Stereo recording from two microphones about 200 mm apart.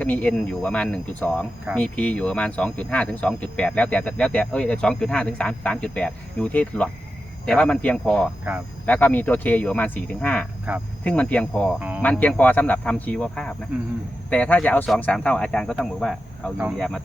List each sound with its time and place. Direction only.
0.0 s speech: 5° left (ahead or behind)
10.7 s speech: 10° right (ahead or behind)
11.0 s speech: 5° left (ahead or behind)
11.8 s speech: 5° right (ahead or behind)
12.0 s speech: 5° left (ahead or behind)